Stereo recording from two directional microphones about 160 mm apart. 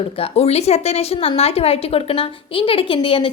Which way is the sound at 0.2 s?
40° left (ahead or behind).